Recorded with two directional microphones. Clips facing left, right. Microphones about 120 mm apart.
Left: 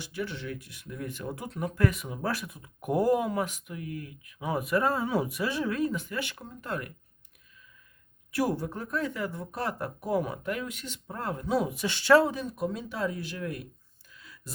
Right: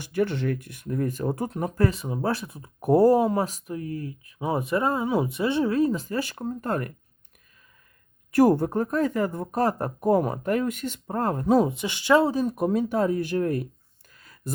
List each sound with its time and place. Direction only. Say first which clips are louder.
0.0 s speech: right 10 dB; 50° right (ahead or behind)
8.3 s speech: right 10 dB; 50° right (ahead or behind)
11.7 s speech: right 1 dB; 20° right (ahead or behind)
12.2 s speech: right 6 dB; 35° right (ahead or behind)
12.5 s speech: right 9 dB; 55° right (ahead or behind)
14.1 s a sound: right 10 dB; 45° right (ahead or behind)